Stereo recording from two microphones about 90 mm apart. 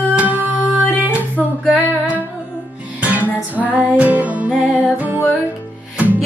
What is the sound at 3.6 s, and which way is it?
Music, 15° right (ahead or behind).